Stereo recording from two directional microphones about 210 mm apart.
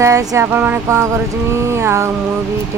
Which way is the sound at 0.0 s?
15° right (ahead or behind).